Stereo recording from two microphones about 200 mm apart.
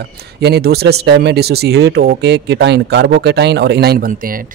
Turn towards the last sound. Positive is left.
turn(degrees=-45)  # may be behind; listen again after turning